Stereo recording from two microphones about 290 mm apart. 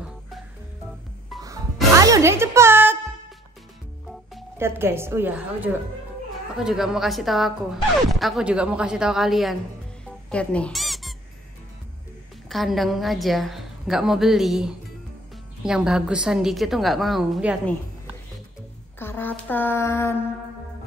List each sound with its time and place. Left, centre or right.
1.3 s music: centre
2.0 s music: centre
4.3 s a woman's voice: centre
10.3 s squeak: centre
12.4 s a woman's voice: centre
18.9 s speech: centre